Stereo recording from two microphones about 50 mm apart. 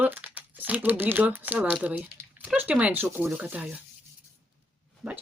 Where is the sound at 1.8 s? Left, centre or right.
Right.